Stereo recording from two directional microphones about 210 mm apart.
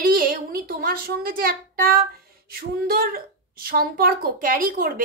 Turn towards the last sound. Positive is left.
turn(degrees=-45)  # may be behind; listen again after turning